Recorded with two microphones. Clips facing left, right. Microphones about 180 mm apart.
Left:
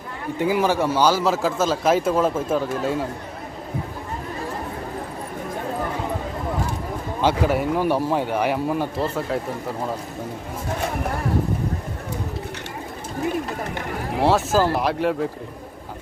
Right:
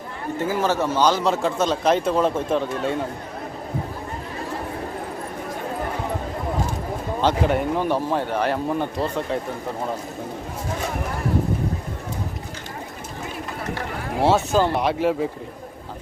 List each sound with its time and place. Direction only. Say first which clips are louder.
0.3 s a man's voice: left 2 dB; 15° left (ahead or behind)
7.2 s speech: even; 5° left (ahead or behind)
14.2 s a man's voice: even; centre (ahead or behind)